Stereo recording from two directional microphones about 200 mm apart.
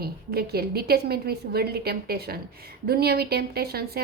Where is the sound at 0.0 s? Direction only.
50° right (ahead or behind).